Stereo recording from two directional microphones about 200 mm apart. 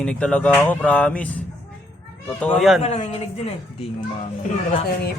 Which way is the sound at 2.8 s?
30° left (ahead or behind).